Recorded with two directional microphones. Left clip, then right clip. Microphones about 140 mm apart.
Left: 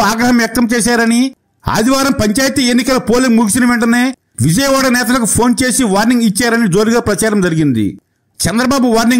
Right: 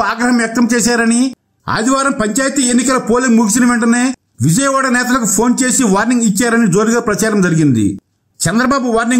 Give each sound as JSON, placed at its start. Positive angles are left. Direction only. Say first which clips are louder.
{"t": 0.4, "sound": "a man's voice", "louder": "left 1 dB", "side_deg": 40}